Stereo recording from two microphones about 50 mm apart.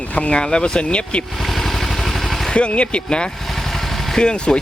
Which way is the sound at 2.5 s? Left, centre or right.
Left.